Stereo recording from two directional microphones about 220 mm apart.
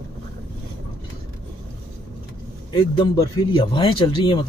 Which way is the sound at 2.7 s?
20° left (ahead or behind).